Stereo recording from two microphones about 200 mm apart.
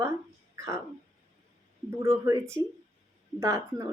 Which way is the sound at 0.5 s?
15° right (ahead or behind).